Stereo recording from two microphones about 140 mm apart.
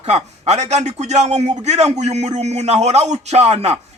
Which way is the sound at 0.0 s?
50° right (ahead or behind).